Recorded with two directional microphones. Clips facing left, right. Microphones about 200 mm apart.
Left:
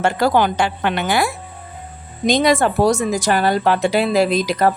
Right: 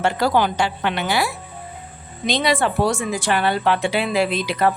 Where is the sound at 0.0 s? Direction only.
50° left (ahead or behind).